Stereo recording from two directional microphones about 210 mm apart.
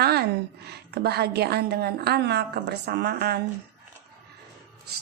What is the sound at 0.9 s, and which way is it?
A woman's voice, 50° right (ahead or behind).